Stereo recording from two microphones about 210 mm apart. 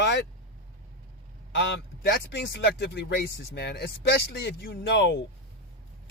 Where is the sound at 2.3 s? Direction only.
50° left (ahead or behind).